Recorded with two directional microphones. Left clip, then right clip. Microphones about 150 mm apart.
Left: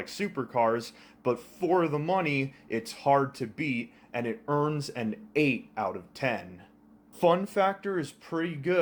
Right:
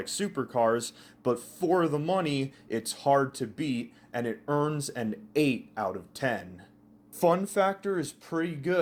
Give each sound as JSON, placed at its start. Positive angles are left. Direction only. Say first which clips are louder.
{"t": 0.0, "sound": "speech", "louder": "right 1 dB", "side_deg": -30}